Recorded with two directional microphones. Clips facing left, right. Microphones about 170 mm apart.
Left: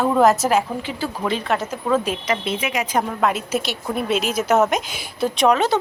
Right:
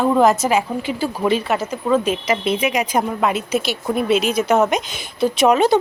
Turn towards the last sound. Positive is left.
turn(degrees=-10)  # may be behind; listen again after turning